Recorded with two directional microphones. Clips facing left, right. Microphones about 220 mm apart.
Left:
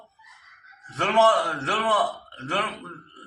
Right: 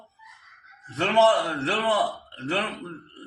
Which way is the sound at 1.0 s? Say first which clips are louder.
Even; 25° right (ahead or behind).